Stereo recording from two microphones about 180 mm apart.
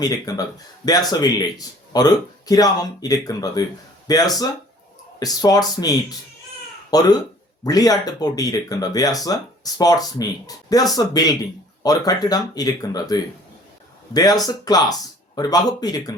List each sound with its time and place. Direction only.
0.0 s speech: 20° left (ahead or behind)